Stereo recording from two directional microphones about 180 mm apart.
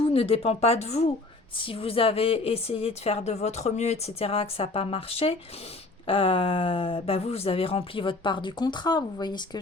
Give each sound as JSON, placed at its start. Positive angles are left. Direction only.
{"t": 0.0, "sound": "a woman's voice", "side_deg": 30}